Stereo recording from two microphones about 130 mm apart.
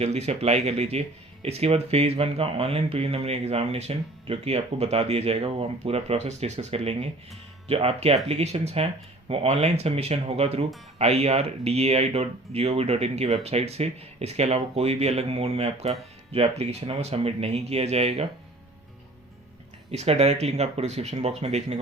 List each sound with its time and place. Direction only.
0.0 s speech: 55° right (ahead or behind)
19.9 s speech: 55° right (ahead or behind)